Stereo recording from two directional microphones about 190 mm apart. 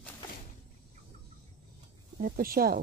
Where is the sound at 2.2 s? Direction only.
50° right (ahead or behind).